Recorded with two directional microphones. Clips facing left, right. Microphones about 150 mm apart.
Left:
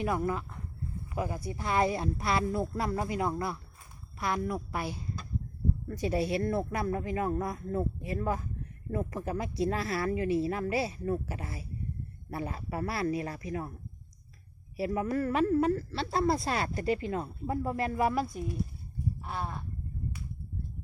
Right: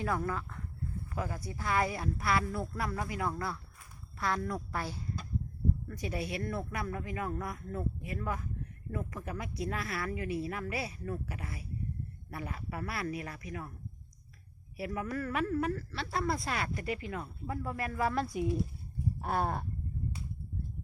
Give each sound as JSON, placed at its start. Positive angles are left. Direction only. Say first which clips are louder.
{"t": 0.0, "sound": "a woman's voice", "louder": "left 3 dB", "side_deg": 20}
{"t": 5.9, "sound": "a woman's voice", "louder": "left 7 dB", "side_deg": 30}
{"t": 14.8, "sound": "a woman's voice", "louder": "left 6 dB", "side_deg": 25}
{"t": 18.3, "sound": "speech", "louder": "right 4 dB", "side_deg": -15}
{"t": 19.2, "sound": "a sound", "louder": "right 9 dB", "side_deg": -50}